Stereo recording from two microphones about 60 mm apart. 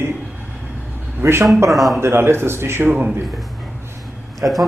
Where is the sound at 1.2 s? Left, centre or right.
Right.